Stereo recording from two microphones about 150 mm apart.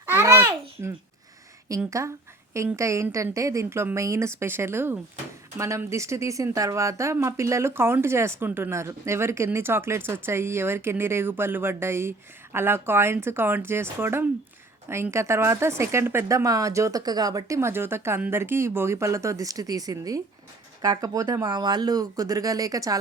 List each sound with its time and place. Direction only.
0.0 s babbling: 15° right (ahead or behind)
1.9 s a woman's voice: 20° right (ahead or behind)